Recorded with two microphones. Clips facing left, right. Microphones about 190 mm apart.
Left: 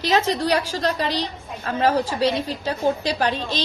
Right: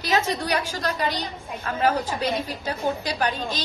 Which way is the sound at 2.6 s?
35° left (ahead or behind).